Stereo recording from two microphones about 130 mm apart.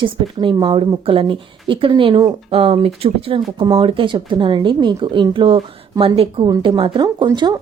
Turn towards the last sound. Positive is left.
turn(degrees=-35)  # may be behind; listen again after turning